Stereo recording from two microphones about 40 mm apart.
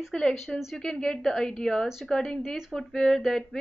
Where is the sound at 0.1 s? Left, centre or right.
Centre.